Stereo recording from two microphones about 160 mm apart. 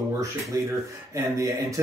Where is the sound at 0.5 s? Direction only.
20° right (ahead or behind).